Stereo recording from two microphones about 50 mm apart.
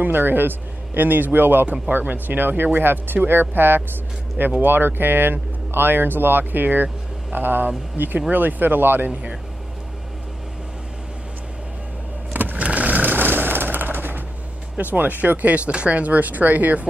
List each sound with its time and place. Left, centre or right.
0.0 s speech: right
12.4 s vehicle: right
14.8 s speech: right